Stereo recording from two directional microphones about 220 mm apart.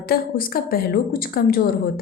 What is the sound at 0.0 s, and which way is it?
A woman's voice, 45° left (ahead or behind).